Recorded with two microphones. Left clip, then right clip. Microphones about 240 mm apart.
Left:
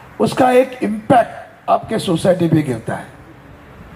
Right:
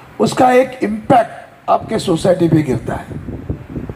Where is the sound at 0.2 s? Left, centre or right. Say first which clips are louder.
Right 1 dB; centre.